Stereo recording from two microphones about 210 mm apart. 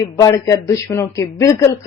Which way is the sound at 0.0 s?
15° left (ahead or behind).